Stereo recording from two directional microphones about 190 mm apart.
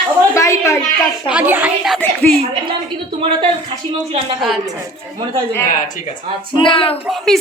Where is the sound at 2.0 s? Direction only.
10° left (ahead or behind).